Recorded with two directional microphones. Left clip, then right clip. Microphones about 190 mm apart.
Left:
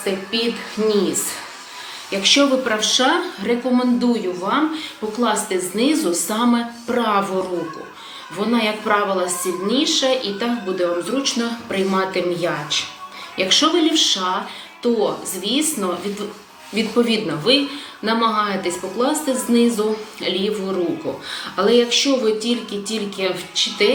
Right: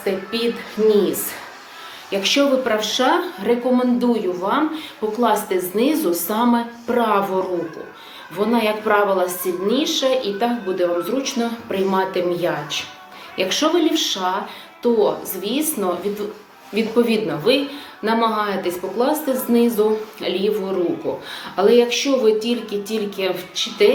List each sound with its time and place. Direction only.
0.0 s music: 10° left (ahead or behind)
2.0 s speech: 25° left (ahead or behind)
8.4 s speech: 25° left (ahead or behind)